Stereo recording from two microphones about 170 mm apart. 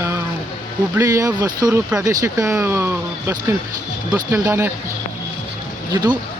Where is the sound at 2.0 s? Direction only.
15° right (ahead or behind).